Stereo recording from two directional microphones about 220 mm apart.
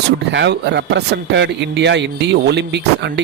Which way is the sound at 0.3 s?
50° right (ahead or behind).